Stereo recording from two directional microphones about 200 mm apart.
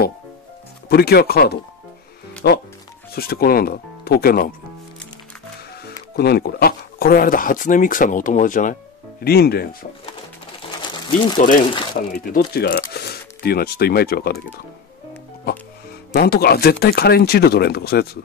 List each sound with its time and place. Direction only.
0.8 s speech: 50° left (ahead or behind)
6.1 s speech: 50° left (ahead or behind)
11.3 s speech: 40° left (ahead or behind)
16.2 s speech: 50° left (ahead or behind)